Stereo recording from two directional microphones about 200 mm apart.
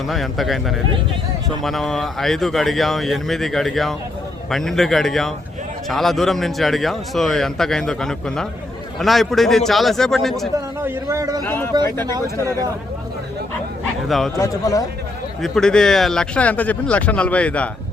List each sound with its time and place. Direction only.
0.1 s a man's voice: centre (ahead or behind)
1.6 s a man's voice: centre (ahead or behind)
10.8 s a man's voice: 15° right (ahead or behind)
11.4 s a man's voice: 10° left (ahead or behind)
14.1 s a man's voice: centre (ahead or behind)
14.3 s a man's voice: 15° left (ahead or behind)
15.4 s a man's voice: centre (ahead or behind)